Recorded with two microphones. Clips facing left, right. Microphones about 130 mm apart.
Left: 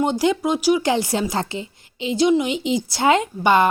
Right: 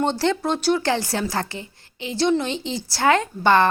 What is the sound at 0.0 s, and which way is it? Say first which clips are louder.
A woman's voice: left 2 dB; 15° left (ahead or behind).